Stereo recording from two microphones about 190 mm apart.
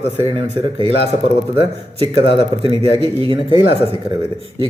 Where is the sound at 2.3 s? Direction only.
25° right (ahead or behind).